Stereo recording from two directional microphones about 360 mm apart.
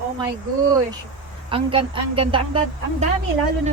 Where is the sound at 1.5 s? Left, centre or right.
Centre.